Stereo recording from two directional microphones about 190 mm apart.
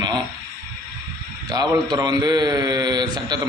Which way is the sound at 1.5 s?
20° right (ahead or behind).